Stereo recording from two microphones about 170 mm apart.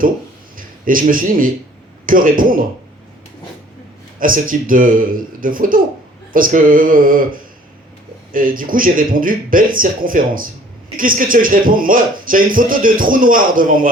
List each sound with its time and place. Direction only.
0.5 s a man's voice: 55° right (ahead or behind)
4.2 s a man's voice: 55° right (ahead or behind)